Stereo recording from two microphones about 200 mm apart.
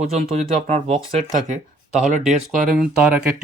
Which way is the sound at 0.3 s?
35° right (ahead or behind).